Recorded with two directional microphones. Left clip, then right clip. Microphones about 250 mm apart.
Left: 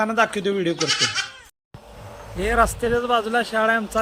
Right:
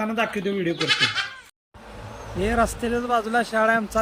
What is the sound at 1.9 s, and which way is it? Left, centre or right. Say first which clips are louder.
Vehicle: right 2 dB; left.